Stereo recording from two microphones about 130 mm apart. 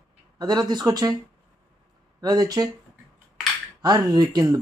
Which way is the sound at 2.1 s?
30° right (ahead or behind).